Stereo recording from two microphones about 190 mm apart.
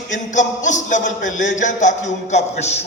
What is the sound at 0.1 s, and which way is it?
A man's voice, 40° left (ahead or behind).